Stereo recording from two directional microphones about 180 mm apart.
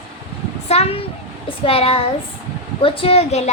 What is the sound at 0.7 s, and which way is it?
A child's voice, 35° left (ahead or behind).